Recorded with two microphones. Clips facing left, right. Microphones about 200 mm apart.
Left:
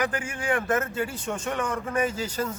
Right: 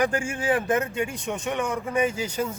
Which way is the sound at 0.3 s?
25° right (ahead or behind).